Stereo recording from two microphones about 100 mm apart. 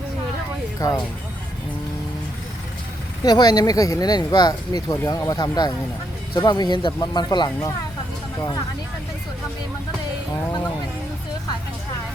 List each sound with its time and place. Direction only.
0.8 s speech: 35° left (ahead or behind)
3.2 s speech: 45° left (ahead or behind)